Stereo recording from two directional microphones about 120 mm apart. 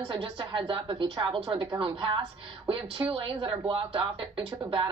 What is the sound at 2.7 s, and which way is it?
A woman's voice, 50° right (ahead or behind).